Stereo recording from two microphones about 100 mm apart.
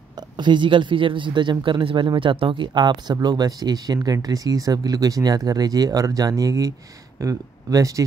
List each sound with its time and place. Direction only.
0.4 s speech: 50° right (ahead or behind); by 8.0 s 35° right (ahead or behind)